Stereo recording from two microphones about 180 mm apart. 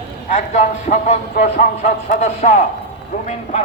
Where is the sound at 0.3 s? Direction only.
40° left (ahead or behind).